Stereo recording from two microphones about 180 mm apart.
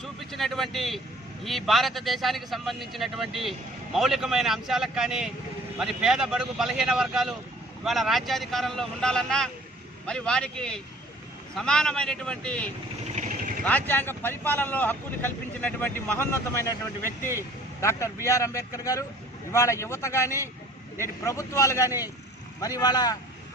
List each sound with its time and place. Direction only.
0.0 s speech: centre (ahead or behind)
13.1 s vehicle: 45° right (ahead or behind)
13.7 s speech: 10° left (ahead or behind)
17.1 s speech: 15° right (ahead or behind)
17.7 s speech: 15° left (ahead or behind)